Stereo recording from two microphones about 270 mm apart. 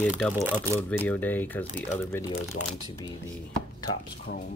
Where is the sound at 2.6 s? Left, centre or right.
Left.